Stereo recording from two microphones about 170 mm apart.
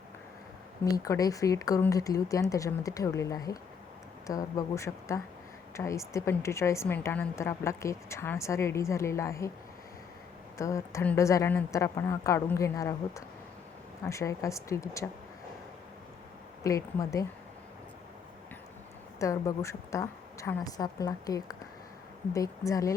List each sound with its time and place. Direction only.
0.9 s a woman's voice: 20° left (ahead or behind)
10.6 s a woman's voice: 20° left (ahead or behind)
16.6 s speech: 20° left (ahead or behind)
19.2 s speech: 20° left (ahead or behind)